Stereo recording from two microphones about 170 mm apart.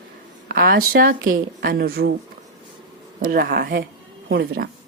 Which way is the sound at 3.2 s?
60° right (ahead or behind).